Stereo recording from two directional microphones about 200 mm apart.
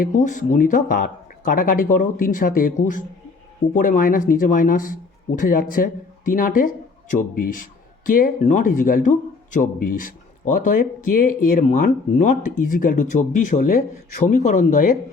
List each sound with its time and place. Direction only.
0.0 s speech: 40° left (ahead or behind)